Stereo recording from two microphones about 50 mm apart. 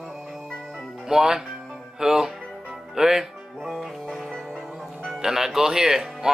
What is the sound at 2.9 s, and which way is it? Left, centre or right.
Music, centre.